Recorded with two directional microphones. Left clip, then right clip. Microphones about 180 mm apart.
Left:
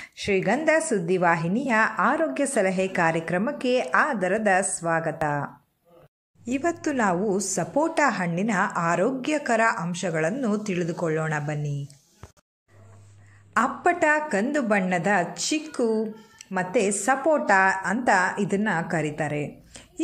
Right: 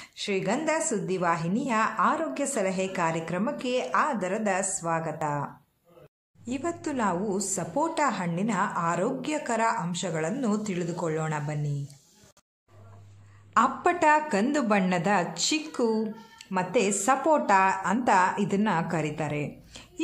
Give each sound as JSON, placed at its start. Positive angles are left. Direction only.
{"t": 0.0, "sound": "a woman's voice", "side_deg": 20}
{"t": 6.4, "sound": "a woman's voice", "side_deg": 15}
{"t": 13.5, "sound": "a woman's voice", "side_deg": 5}